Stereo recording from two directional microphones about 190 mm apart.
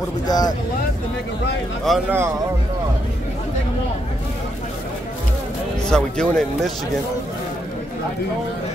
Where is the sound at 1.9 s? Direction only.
Centre (ahead or behind).